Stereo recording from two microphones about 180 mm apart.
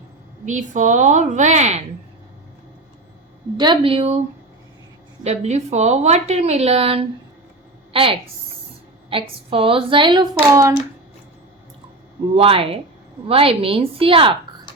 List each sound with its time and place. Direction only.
0.4 s a woman's voice: 45° right (ahead or behind)
3.6 s a woman's voice: 25° right (ahead or behind)
5.2 s a woman's voice: 40° right (ahead or behind)
9.0 s speech: 30° right (ahead or behind)
12.4 s a woman's voice: 30° right (ahead or behind)